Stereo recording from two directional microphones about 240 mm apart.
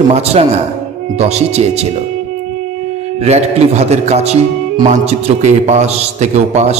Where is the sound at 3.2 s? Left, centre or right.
Right.